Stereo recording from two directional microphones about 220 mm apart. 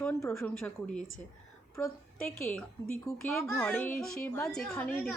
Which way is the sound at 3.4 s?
10° left (ahead or behind).